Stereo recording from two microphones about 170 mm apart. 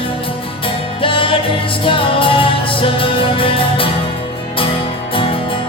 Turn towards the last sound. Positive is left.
turn(degrees=30)  # may be behind; listen again after turning